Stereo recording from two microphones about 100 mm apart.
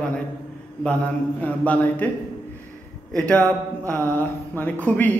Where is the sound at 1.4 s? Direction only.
15° left (ahead or behind).